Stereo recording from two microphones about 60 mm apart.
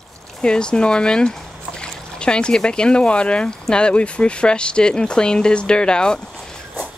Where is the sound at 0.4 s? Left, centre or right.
Centre.